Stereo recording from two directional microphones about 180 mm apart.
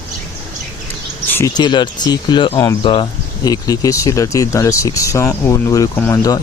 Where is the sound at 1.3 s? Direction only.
15° left (ahead or behind).